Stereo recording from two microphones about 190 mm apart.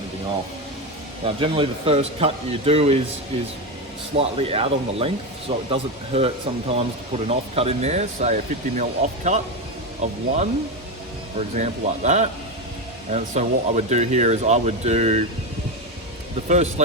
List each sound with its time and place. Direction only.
1.2 s speech: 30° right (ahead or behind)
4.2 s speech: 30° right (ahead or behind)
16.5 s speech: 35° right (ahead or behind)